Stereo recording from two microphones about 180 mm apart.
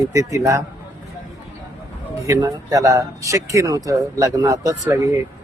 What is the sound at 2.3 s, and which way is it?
Speech, 20° right (ahead or behind).